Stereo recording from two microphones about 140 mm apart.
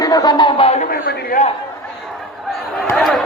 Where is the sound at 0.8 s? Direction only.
90° left.